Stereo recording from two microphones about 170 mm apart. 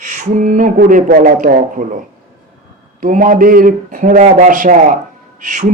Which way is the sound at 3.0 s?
50° right (ahead or behind).